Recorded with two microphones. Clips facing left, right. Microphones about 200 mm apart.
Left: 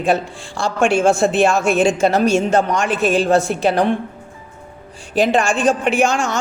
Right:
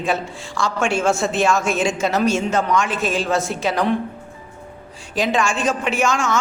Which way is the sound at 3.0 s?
60° left (ahead or behind).